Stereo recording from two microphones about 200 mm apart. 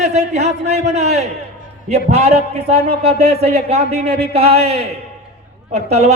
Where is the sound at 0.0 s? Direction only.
35° right (ahead or behind).